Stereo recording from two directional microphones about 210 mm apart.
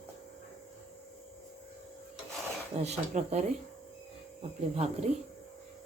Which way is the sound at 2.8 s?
30° right (ahead or behind).